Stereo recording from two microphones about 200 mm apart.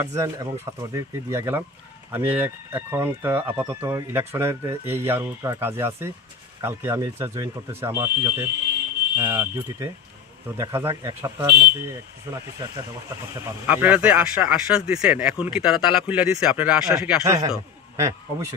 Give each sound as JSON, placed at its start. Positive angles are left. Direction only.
{"t": 0.0, "sound": "speech", "side_deg": -15}
{"t": 17.2, "sound": "a man's voice", "side_deg": -15}